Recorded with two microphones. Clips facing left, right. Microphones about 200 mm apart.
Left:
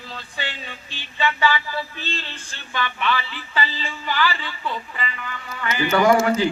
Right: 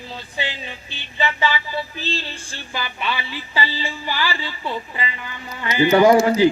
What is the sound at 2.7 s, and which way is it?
Music, 30° right (ahead or behind).